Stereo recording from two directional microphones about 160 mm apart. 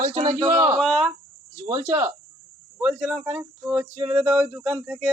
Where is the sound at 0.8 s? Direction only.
Centre (ahead or behind).